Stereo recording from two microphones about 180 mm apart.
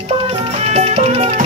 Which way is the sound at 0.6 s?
35° right (ahead or behind).